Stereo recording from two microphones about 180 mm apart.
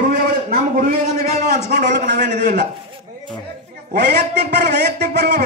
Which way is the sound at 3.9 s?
65° right (ahead or behind).